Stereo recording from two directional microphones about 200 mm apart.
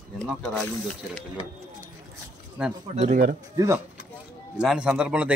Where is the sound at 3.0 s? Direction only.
40° right (ahead or behind).